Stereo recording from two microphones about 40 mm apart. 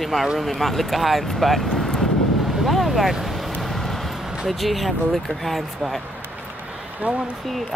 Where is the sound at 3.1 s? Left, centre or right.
Centre.